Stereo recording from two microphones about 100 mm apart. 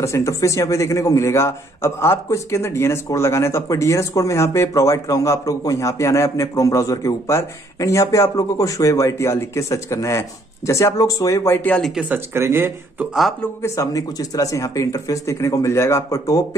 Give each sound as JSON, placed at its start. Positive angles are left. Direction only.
{"t": 0.0, "sound": "a man's voice", "side_deg": 30}
{"t": 11.9, "sound": "speech", "side_deg": -10}
{"t": 12.4, "sound": "speech", "side_deg": -25}
{"t": 13.6, "sound": "a man's voice", "side_deg": 35}